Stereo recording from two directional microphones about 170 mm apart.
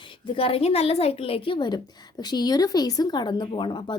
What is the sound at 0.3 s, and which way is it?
A woman's voice, 35° left (ahead or behind).